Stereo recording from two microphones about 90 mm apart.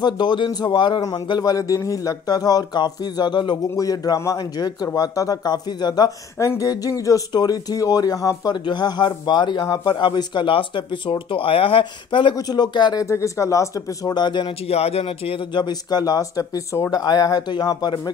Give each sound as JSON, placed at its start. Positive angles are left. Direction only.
{"t": 0.0, "sound": "a man's voice", "side_deg": 55}
{"t": 1.4, "sound": "a man's voice", "side_deg": 45}
{"t": 3.7, "sound": "a man's voice", "side_deg": 40}
{"t": 6.3, "sound": "speech", "side_deg": 35}
{"t": 8.6, "sound": "a man's voice", "side_deg": 55}
{"t": 12.4, "sound": "a man's voice", "side_deg": 50}
{"t": 13.0, "sound": "speech", "side_deg": 35}
{"t": 14.1, "sound": "a man's voice", "side_deg": 60}